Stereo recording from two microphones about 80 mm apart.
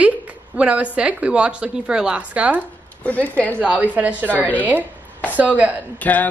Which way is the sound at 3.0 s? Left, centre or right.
Centre.